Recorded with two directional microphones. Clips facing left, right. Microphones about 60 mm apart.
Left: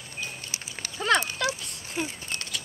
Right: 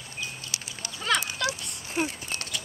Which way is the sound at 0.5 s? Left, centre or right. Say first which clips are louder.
Even; left.